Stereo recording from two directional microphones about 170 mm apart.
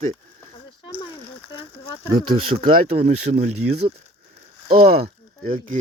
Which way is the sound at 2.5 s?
35° right (ahead or behind).